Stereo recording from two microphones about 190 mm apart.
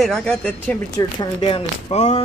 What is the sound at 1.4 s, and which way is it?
Speech, 35° left (ahead or behind).